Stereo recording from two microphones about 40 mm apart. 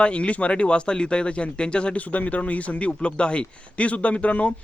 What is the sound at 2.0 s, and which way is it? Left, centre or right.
Speech, left.